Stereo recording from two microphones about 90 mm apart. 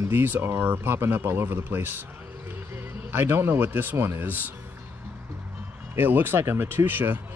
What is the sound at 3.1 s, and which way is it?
Speech, 25° right (ahead or behind).